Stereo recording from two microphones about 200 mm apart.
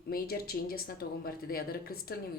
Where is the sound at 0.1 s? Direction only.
50° left (ahead or behind).